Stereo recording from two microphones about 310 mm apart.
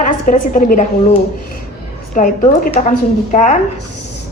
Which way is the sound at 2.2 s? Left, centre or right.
Left.